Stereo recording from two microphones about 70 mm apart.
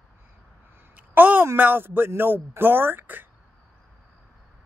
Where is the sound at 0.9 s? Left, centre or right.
Right.